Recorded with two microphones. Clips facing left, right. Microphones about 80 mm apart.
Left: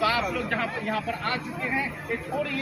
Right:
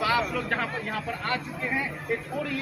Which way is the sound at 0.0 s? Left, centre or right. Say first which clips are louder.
Left 1 dB; right.